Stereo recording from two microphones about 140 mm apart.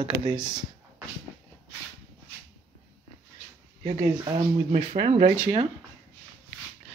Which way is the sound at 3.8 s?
50° right (ahead or behind).